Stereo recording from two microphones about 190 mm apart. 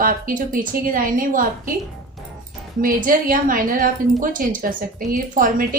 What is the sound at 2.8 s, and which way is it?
A woman's voice, 45° right (ahead or behind).